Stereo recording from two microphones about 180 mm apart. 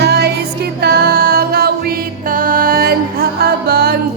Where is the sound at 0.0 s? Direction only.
65° right (ahead or behind).